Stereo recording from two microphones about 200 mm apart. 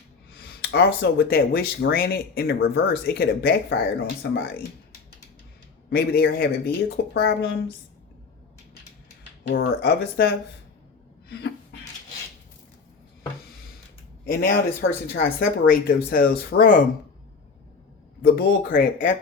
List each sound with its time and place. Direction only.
0.3 s speech: 50° left (ahead or behind)
5.9 s speech: 50° left (ahead or behind)
9.5 s speech: 50° left (ahead or behind)
11.3 s a sound: 55° left (ahead or behind)
14.3 s speech: 45° left (ahead or behind)
18.2 s speech: 45° left (ahead or behind)